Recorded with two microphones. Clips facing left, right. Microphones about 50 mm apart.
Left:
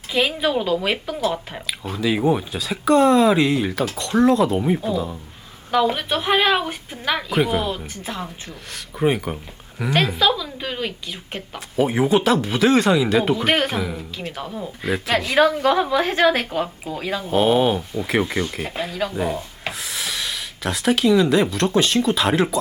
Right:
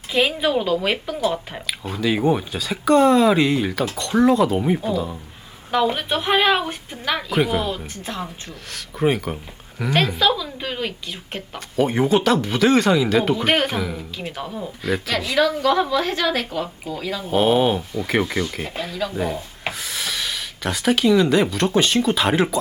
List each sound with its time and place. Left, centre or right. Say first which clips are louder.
0.1 s a woman's voice: right 1 dB; centre
15.4 s speech: left 1 dB; left
17.3 s a woman's voice: even; centre